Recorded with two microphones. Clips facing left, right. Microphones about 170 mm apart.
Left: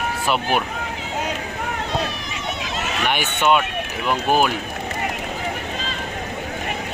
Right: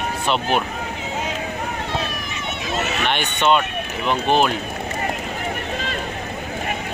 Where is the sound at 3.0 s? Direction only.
5° left (ahead or behind).